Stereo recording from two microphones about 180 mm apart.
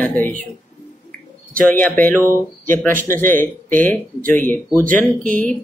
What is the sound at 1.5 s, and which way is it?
Speech, 10° left (ahead or behind).